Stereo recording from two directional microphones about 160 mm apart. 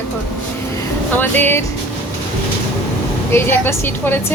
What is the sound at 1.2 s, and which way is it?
Speech, 10° left (ahead or behind).